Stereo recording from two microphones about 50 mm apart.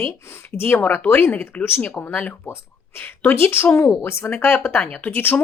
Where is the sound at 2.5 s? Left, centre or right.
Left.